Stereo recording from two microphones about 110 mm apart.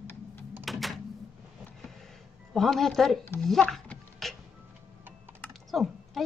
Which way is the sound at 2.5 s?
Centre (ahead or behind).